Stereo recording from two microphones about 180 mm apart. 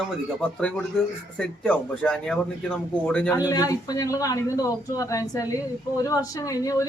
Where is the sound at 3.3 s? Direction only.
20° left (ahead or behind).